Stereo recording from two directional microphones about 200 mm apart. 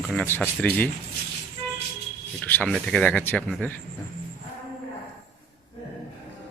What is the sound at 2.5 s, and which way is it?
Speech, 5° left (ahead or behind).